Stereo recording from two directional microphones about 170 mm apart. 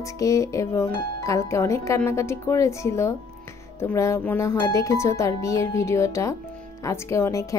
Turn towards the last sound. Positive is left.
turn(degrees=15)  # may be behind; listen again after turning